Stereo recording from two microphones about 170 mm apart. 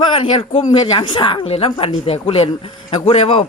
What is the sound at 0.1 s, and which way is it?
Speech, 35° left (ahead or behind).